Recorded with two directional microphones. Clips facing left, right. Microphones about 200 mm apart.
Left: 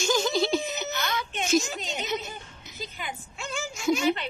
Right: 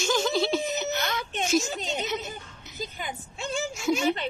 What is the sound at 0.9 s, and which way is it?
Speech, 40° right (ahead or behind).